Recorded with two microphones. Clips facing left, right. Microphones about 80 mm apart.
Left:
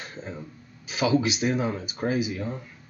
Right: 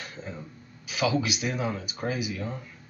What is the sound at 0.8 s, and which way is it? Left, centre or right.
Speech, left.